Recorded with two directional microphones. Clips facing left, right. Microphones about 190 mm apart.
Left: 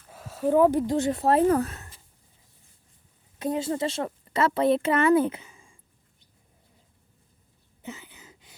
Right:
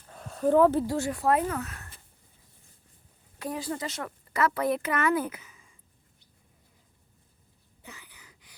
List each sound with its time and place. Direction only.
0.1 s speech: 5° left (ahead or behind); by 1.8 s 35° left (ahead or behind)
3.3 s a woman's voice: 20° left (ahead or behind)
7.8 s a sound: 20° left (ahead or behind)